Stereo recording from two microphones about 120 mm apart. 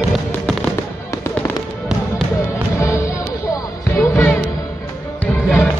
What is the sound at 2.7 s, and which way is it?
Music, 25° left (ahead or behind).